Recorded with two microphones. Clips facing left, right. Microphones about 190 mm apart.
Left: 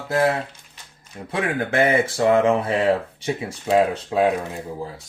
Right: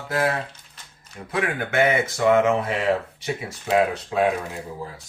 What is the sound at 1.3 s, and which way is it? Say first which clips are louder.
Speech: left 2 dB; 25° left (ahead or behind).